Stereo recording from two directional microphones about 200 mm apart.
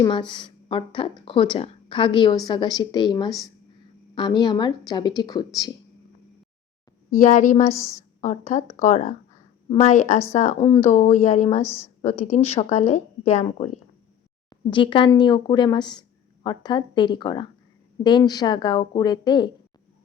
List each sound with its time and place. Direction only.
0.0 s speech: 25° left (ahead or behind)
7.1 s a woman's voice: 40° left (ahead or behind)
7.7 s a woman's voice: 15° left (ahead or behind)
8.2 s a woman's voice: 35° left (ahead or behind)
10.6 s speech: 20° left (ahead or behind)
10.8 s a woman's voice: 30° left (ahead or behind)
11.6 s a woman's voice: 10° left (ahead or behind)
12.2 s a woman's voice: 30° left (ahead or behind)
14.7 s speech: 25° left (ahead or behind)